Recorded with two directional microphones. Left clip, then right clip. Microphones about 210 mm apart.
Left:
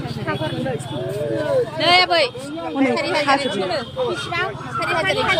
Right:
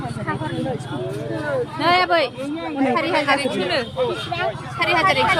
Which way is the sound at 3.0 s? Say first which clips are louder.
Right 1 dB; 45° right (ahead or behind).